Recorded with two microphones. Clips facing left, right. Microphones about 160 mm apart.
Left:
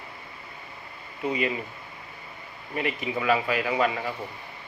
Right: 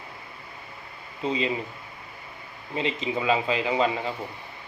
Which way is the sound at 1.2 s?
20° right (ahead or behind).